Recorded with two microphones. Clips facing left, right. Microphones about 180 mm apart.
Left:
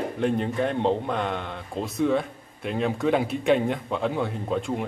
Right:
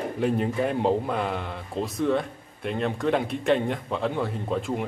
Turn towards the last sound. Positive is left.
turn(degrees=0)  # may be behind; listen again after turning